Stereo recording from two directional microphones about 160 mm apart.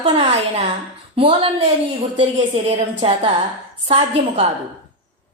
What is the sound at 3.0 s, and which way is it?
A woman's voice, 35° right (ahead or behind).